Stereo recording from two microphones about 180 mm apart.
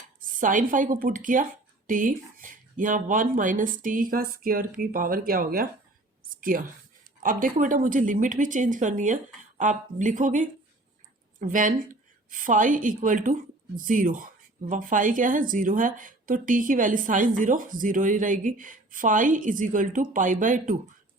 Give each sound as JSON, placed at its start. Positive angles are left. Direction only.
{"t": 0.2, "sound": "speech", "side_deg": -45}
{"t": 6.3, "sound": "a sound", "side_deg": -50}
{"t": 7.2, "sound": "speech", "side_deg": -50}